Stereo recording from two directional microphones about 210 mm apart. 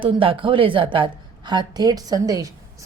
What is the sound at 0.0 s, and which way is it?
A woman's voice, 25° right (ahead or behind).